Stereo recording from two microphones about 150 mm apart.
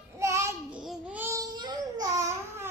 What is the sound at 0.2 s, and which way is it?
Child singing, 20° right (ahead or behind).